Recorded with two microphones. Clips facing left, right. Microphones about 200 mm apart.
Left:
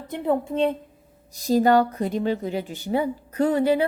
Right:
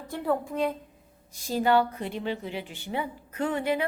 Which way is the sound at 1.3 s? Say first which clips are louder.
Left 6 dB; 40° left (ahead or behind).